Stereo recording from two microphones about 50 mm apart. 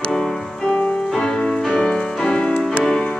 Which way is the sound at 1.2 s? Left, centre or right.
Centre.